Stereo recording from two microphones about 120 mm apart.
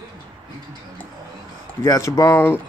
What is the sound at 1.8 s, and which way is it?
Speech, 30° left (ahead or behind).